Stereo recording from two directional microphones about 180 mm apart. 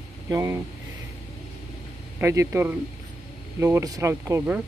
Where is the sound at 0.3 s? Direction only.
15° right (ahead or behind).